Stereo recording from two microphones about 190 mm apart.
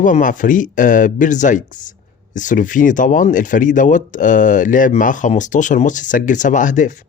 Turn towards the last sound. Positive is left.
turn(degrees=40)  # may be behind; listen again after turning